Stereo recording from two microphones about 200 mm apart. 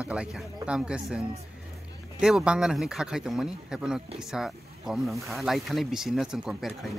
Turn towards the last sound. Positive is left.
turn(degrees=0)  # may be behind; listen again after turning